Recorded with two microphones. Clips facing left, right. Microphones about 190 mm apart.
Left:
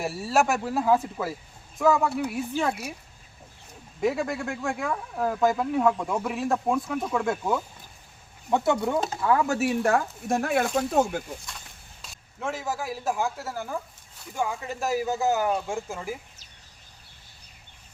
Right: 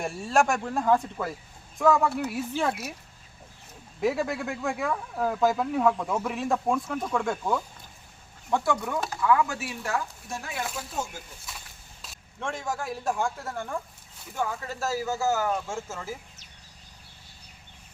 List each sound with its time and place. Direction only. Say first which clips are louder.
0.0 s speech: even; 5° left (ahead or behind)
4.0 s speech: left 1 dB; centre (ahead or behind)
8.4 s speech: left 3 dB; 20° left (ahead or behind)
9.2 s speech: left 1 dB; 35° left (ahead or behind); by 11.2 s 60° left (ahead or behind)
11.5 s a sound: left 1 dB; 5° right (ahead or behind)
12.0 s speech: left 2 dB; centre (ahead or behind)